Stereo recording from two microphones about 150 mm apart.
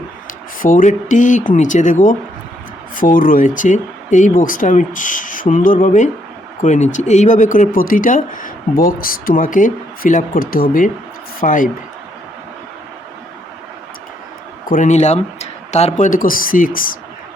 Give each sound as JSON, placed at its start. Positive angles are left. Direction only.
{"t": 0.6, "sound": "speech", "side_deg": 60}
{"t": 14.7, "sound": "speech", "side_deg": 55}